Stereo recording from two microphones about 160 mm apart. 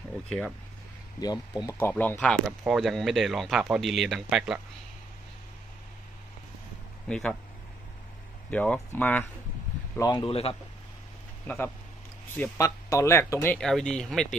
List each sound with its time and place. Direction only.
0.3 s speech: 5° left (ahead or behind)
1.2 s speech: 25° left (ahead or behind)
1.8 s speech: 10° left (ahead or behind)
2.6 s speech: centre (ahead or behind)
7.1 s speech: 5° left (ahead or behind)
8.4 s speech: 10° left (ahead or behind)
9.9 s speech: 25° left (ahead or behind)
11.4 s speech: 10° left (ahead or behind)
13.6 s speech: centre (ahead or behind)